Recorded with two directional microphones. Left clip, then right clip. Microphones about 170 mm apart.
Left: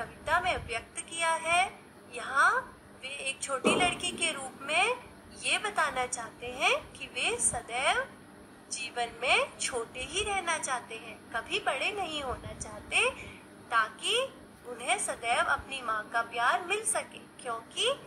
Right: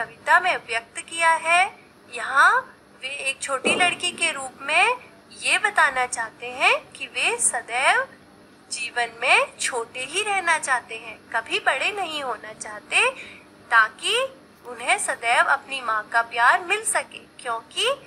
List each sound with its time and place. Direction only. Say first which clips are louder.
0.0 s a woman's voice: right 10 dB; 10° right (ahead or behind)